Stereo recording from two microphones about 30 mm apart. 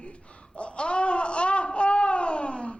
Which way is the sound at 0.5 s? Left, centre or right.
Left.